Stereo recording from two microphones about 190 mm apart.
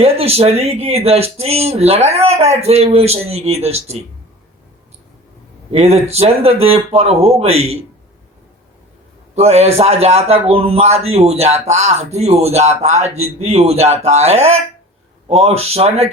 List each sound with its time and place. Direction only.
0.0 s a man's voice: 30° right (ahead or behind)
5.7 s a man's voice: 35° right (ahead or behind)
9.3 s a man's voice: 35° right (ahead or behind)